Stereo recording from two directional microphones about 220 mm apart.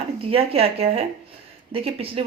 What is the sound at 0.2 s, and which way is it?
Speech, 25° right (ahead or behind).